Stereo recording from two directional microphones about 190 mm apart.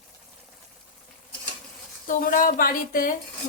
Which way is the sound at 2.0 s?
45° left (ahead or behind).